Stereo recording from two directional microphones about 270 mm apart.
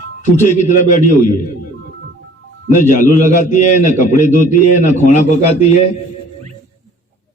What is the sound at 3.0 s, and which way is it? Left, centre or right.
A man's voice, left.